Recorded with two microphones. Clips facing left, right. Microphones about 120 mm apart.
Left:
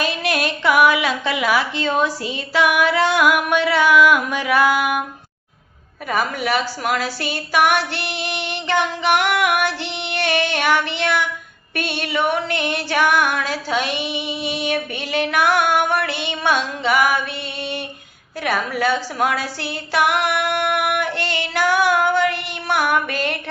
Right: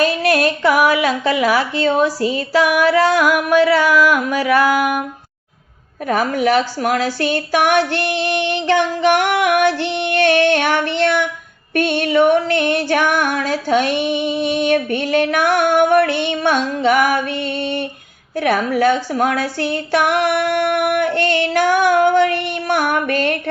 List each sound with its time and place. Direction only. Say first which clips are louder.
0.0 s a woman's voice: right 6 dB; 40° right (ahead or behind)
6.1 s female singing: right 5 dB; 45° right (ahead or behind)